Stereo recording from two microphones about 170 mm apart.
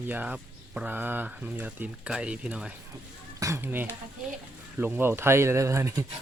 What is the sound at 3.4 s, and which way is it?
Speech, 15° right (ahead or behind).